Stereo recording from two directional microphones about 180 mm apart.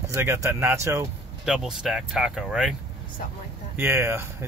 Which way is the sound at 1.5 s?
5° right (ahead or behind).